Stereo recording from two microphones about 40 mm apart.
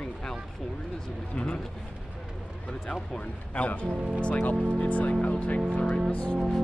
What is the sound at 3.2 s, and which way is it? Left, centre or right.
Speech, left.